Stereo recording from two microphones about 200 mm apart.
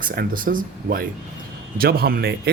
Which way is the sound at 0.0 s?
45° right (ahead or behind).